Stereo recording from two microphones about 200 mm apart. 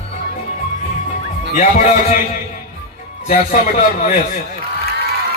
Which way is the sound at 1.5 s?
35° left (ahead or behind).